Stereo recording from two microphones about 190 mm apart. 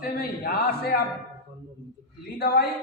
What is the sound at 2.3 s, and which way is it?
Speech, 55° left (ahead or behind).